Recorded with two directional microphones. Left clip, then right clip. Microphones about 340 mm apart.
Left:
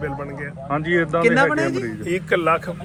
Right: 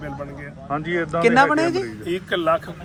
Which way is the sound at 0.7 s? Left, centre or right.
Left.